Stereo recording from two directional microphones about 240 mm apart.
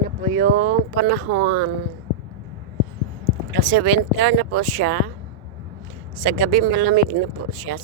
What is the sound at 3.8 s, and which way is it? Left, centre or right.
Speech, right.